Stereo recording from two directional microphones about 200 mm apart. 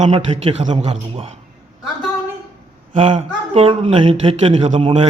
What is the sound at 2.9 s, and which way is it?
Speech, 30° right (ahead or behind).